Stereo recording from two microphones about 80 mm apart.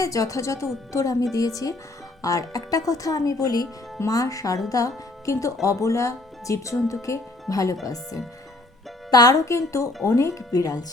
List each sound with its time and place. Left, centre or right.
0.0 s speech: left
9.0 s speech: left
9.5 s speech: left